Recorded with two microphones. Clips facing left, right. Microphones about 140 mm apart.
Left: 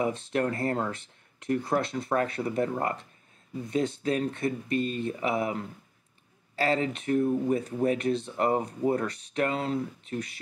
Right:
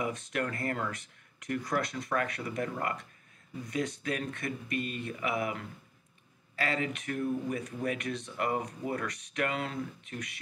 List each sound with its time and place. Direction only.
0.0 s speech: 30° left (ahead or behind)